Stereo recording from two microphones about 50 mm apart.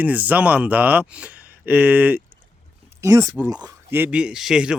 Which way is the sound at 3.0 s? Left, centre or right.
Right.